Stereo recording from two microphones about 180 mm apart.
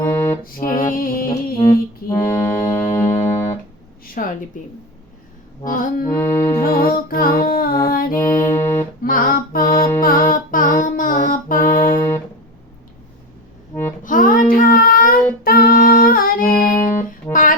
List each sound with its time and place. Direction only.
0.0 s music: 10° left (ahead or behind)
0.4 s music: 50° left (ahead or behind)
1.5 s music: 15° left (ahead or behind)
4.0 s a sound: 50° left (ahead or behind)
5.6 s music: 50° left (ahead or behind)
6.1 s music: 15° left (ahead or behind)
6.6 s music: 55° left (ahead or behind)
7.9 s mantra: 55° left (ahead or behind)
8.2 s music: 15° left (ahead or behind)
9.0 s music: 50° left (ahead or behind)
11.9 s music: 15° left (ahead or behind)
14.0 s child singing: 50° left (ahead or behind)